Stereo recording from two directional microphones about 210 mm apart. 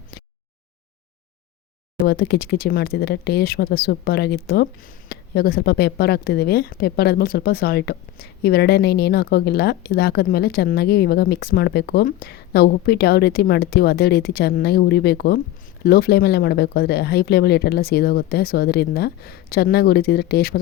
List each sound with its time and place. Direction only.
2.0 s speech: 50° left (ahead or behind)